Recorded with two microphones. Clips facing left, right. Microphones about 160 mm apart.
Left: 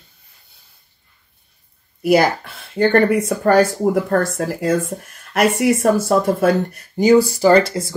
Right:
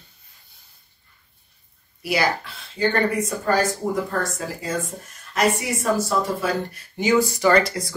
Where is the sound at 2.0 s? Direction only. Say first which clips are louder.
Left 8 dB; 50° left (ahead or behind).